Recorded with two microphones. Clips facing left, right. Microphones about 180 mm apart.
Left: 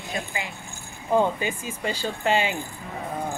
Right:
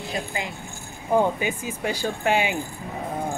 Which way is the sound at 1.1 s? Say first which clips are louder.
Right 1 dB; 15° right (ahead or behind).